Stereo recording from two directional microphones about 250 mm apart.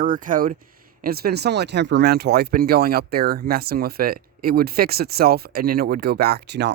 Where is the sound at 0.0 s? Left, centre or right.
Right.